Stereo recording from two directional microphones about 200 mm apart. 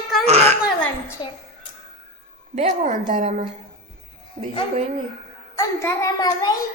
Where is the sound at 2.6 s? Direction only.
35° right (ahead or behind).